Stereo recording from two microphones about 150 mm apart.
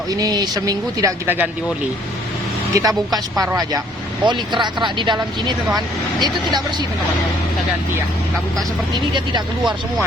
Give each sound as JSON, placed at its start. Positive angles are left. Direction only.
{"t": 0.1, "sound": "speech", "side_deg": -25}
{"t": 2.7, "sound": "speech", "side_deg": -25}